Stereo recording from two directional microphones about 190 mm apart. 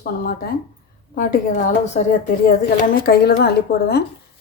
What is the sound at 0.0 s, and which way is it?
Speech, 50° left (ahead or behind).